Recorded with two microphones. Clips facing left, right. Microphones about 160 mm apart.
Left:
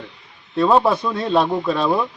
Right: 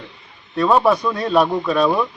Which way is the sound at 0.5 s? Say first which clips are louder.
Even; 25° left (ahead or behind).